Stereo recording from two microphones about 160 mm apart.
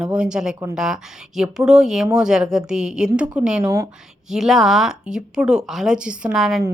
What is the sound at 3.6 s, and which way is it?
Speech, 20° right (ahead or behind).